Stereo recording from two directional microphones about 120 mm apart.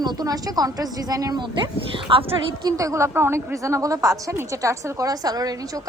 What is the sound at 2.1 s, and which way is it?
Speech, 50° right (ahead or behind).